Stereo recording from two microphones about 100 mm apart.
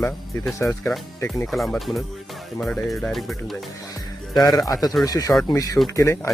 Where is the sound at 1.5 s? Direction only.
Centre (ahead or behind).